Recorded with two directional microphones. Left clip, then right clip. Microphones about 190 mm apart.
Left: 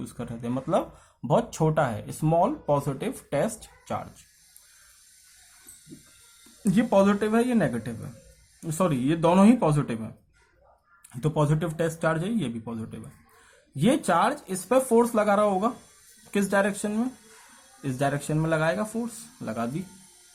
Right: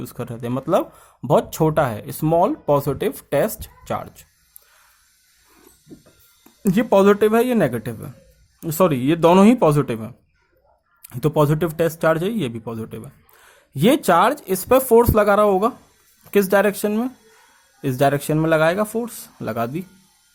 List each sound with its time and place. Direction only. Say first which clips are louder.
0.0 s speech: right 6 dB; 50° right (ahead or behind)
6.6 s speech: right 6 dB; 50° right (ahead or behind)
11.1 s speech: right 8 dB; 45° right (ahead or behind)